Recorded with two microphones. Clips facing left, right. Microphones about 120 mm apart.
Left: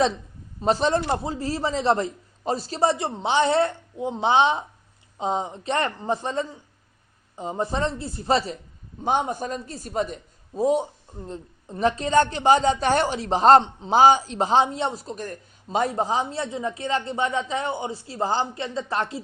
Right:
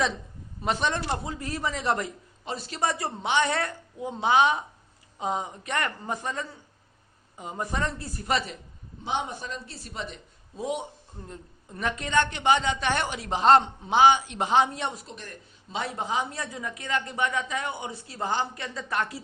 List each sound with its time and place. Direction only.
0.6 s a man's voice: 35° left (ahead or behind)
9.0 s a man's voice: 45° left (ahead or behind); by 19.2 s 30° left (ahead or behind)